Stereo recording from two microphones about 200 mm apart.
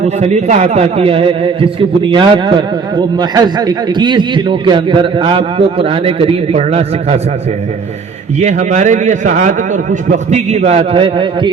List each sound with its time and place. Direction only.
0.0 s a man's voice: 35° right (ahead or behind)
8.4 s a man's voice: 35° right (ahead or behind)